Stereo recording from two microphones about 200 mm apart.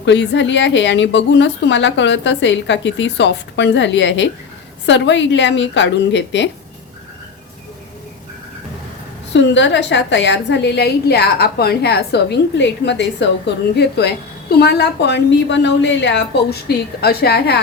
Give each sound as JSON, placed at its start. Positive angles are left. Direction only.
{"t": 0.0, "sound": "speech", "side_deg": 65}
{"t": 9.3, "sound": "speech", "side_deg": 65}